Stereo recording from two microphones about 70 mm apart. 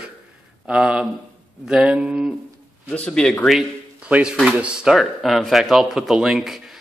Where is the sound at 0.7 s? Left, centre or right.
Centre.